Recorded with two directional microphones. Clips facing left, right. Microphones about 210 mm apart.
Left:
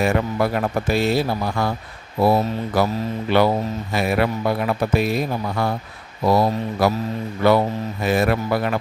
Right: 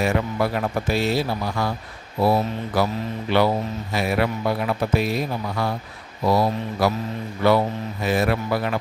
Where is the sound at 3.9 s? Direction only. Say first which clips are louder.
Left 2 dB; 55° left (ahead or behind).